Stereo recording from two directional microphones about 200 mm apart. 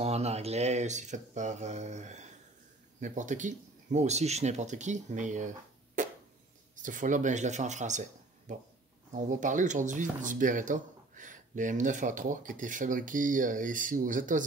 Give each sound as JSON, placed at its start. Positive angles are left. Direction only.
{"t": 0.0, "sound": "speech", "side_deg": -30}
{"t": 6.0, "sound": "a sound", "side_deg": -40}
{"t": 6.7, "sound": "speech", "side_deg": -40}